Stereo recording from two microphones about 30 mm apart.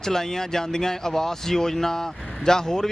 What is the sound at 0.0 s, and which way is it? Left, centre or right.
Speech, centre.